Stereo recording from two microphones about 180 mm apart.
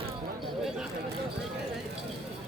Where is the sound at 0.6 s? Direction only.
5° right (ahead or behind).